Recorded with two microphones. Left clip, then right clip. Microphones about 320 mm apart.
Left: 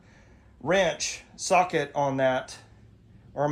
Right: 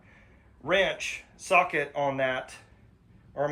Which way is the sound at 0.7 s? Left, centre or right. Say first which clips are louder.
Left 1 dB; left.